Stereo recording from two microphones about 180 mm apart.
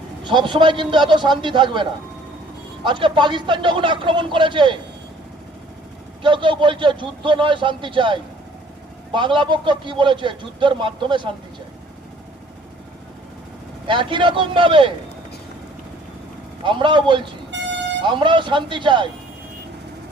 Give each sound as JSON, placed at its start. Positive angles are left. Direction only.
{"t": 0.3, "sound": "a man's voice", "side_deg": -25}
{"t": 6.2, "sound": "a man's voice", "side_deg": -25}
{"t": 13.8, "sound": "a man's voice", "side_deg": -25}
{"t": 16.6, "sound": "a man's voice", "side_deg": -25}